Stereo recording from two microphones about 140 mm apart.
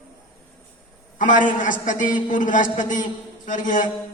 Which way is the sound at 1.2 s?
70° left (ahead or behind).